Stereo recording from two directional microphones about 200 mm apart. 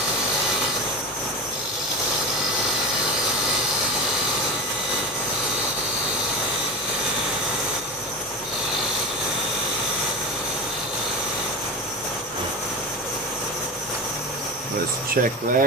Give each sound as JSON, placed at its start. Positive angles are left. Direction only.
{"t": 15.1, "sound": "speech", "side_deg": -45}